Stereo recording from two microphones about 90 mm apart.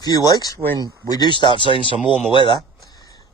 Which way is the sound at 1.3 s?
60° left (ahead or behind).